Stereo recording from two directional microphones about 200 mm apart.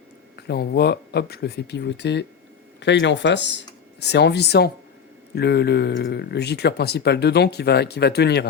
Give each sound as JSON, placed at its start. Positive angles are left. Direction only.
{"t": 0.3, "sound": "speech", "side_deg": 55}